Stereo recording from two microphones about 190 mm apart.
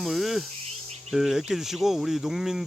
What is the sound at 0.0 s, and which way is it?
Snake, centre (ahead or behind).